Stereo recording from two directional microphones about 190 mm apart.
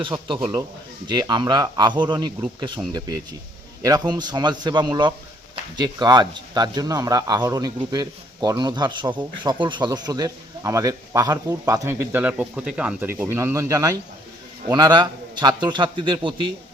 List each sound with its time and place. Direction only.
0.0 s speech: 25° right (ahead or behind)
3.8 s speech: 20° right (ahead or behind)